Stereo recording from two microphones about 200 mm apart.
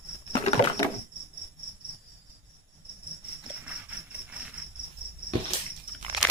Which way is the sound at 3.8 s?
5° right (ahead or behind).